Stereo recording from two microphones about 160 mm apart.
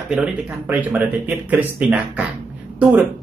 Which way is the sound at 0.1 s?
5° right (ahead or behind).